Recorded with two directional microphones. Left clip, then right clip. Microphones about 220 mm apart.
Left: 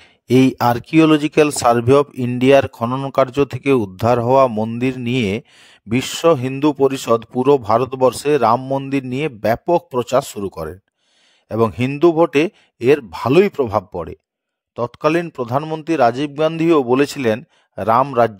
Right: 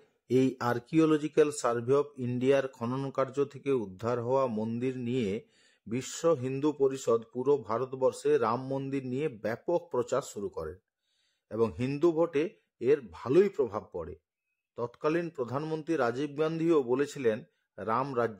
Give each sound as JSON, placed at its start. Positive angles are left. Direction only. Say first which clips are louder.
{"t": 0.0, "sound": "a man's voice", "louder": "left 13 dB", "side_deg": 45}